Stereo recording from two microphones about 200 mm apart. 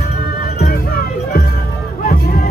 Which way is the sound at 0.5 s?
50° left (ahead or behind).